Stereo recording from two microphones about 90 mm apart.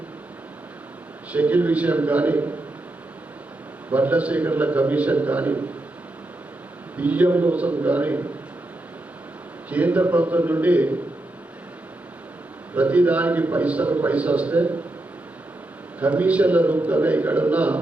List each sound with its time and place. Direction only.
1.3 s a man's voice: 15° right (ahead or behind)
3.9 s a man's voice: 15° right (ahead or behind)
6.9 s a man's voice: 15° right (ahead or behind)
9.6 s a man's voice: 15° right (ahead or behind)
12.7 s a man's voice: 15° right (ahead or behind)
16.0 s a man's voice: 15° right (ahead or behind)